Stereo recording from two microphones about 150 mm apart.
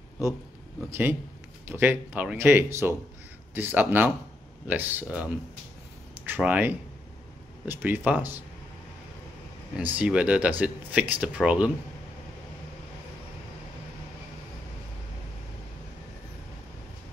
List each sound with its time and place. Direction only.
0.8 s speech: 15° right (ahead or behind)
6.2 s speech: 10° right (ahead or behind)
9.8 s speech: 10° right (ahead or behind)